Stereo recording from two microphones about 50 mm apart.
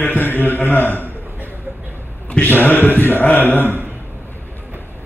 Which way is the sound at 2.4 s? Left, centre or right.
Left.